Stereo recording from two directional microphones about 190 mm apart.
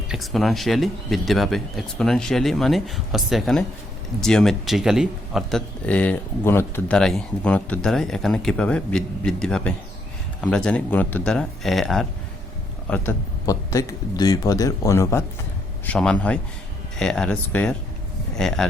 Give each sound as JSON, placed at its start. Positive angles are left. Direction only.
{"t": 0.1, "sound": "a man's voice", "side_deg": 0}